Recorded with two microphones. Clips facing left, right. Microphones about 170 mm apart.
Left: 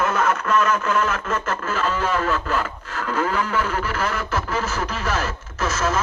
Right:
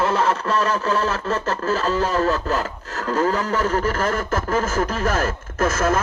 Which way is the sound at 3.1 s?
40° right (ahead or behind).